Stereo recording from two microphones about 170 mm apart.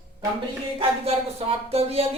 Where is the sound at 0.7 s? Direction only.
35° right (ahead or behind).